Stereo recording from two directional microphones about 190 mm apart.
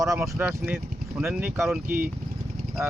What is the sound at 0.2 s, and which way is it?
Speech, 10° right (ahead or behind).